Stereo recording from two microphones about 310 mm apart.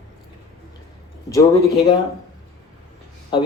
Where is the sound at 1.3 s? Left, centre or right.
Centre.